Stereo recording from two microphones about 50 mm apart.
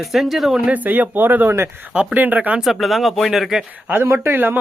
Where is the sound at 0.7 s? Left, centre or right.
Right.